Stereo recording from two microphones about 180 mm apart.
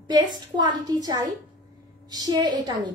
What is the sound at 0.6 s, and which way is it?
A woman's voice, 25° right (ahead or behind).